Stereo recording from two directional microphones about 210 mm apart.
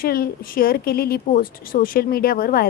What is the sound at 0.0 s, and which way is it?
Speech, 45° left (ahead or behind).